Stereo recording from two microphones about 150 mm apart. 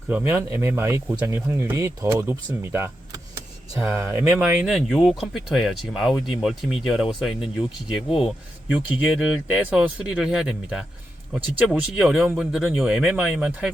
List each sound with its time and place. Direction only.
0.1 s speech: 10° right (ahead or behind)